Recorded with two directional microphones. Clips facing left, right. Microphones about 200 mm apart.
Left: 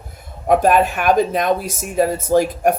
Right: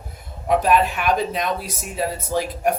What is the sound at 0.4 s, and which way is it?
Speech, 50° left (ahead or behind).